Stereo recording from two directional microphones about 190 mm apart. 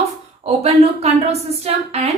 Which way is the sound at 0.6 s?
35° right (ahead or behind).